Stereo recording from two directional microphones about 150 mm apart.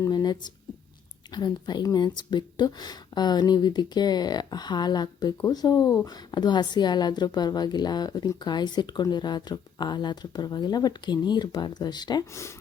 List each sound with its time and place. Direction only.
0.0 s a woman's voice: 25° left (ahead or behind)